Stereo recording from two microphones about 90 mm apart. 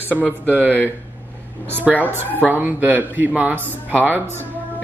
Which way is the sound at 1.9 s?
20° left (ahead or behind).